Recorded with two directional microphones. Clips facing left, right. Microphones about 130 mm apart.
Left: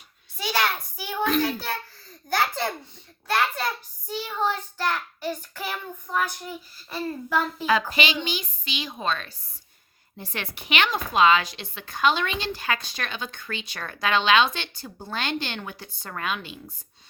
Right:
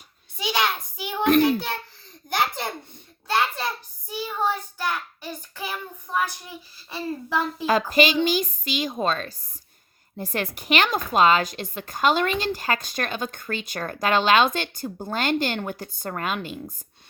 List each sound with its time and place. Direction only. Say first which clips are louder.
0.3 s a sound: right 1 dB; 20° right (ahead or behind)
1.4 s a child's voice: right 6 dB; 20° right (ahead or behind)
2.3 s a sound: even; 15° right (ahead or behind)
4.1 s child singing: right 1 dB; 10° right (ahead or behind)
7.3 s a child's voice: even; 25° right (ahead or behind)
7.7 s a woman's voice: right 5 dB; 45° right (ahead or behind)